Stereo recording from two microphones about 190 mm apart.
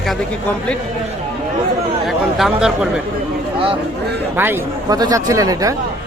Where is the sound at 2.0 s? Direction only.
Centre (ahead or behind).